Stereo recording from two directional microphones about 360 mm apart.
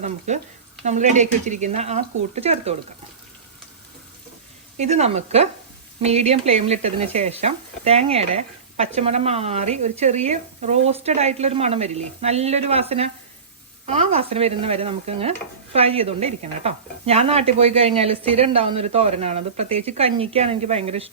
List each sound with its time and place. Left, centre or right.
0.3 s speech: centre
4.8 s stir: centre